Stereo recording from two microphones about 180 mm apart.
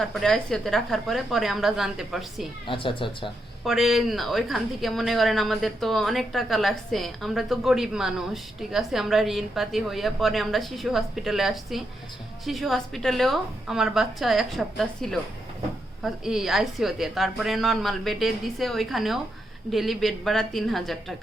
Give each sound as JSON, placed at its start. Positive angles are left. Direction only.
{"t": 0.0, "sound": "speech", "side_deg": 0}
{"t": 2.6, "sound": "speech", "side_deg": 30}
{"t": 3.6, "sound": "speech", "side_deg": 0}